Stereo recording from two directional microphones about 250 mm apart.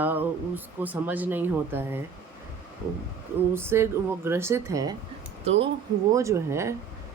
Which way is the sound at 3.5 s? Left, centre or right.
Centre.